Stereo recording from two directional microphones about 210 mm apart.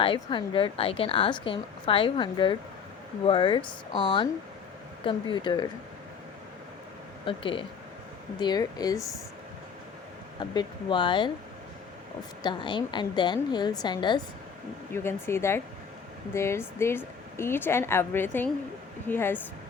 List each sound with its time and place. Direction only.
0.0 s a woman's voice: 25° left (ahead or behind)
7.3 s a woman's voice: 25° left (ahead or behind)
10.5 s a woman's voice: 20° left (ahead or behind)
12.4 s a woman's voice: 20° left (ahead or behind)